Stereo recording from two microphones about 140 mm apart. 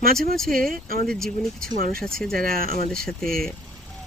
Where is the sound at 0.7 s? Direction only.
90° right.